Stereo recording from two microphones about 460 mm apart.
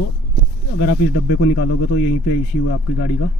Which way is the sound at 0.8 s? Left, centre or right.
Left.